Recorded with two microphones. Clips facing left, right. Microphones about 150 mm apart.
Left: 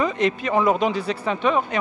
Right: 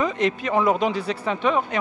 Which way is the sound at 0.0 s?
15° left (ahead or behind).